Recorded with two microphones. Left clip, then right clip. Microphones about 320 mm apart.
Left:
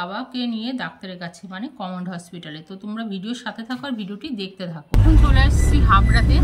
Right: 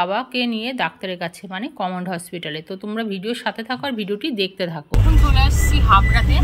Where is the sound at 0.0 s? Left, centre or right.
Centre.